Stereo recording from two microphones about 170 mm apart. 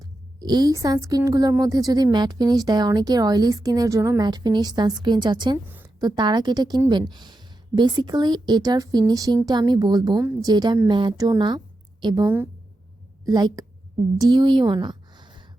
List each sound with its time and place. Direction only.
0.3 s a woman's voice: 25° right (ahead or behind)